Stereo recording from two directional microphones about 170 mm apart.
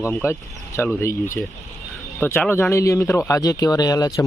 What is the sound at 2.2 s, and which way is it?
Speech, 15° left (ahead or behind).